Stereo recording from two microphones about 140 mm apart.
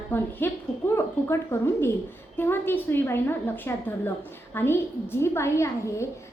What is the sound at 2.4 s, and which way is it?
A woman's voice, 15° left (ahead or behind).